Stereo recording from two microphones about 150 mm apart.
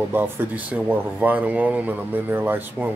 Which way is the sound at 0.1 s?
10° right (ahead or behind).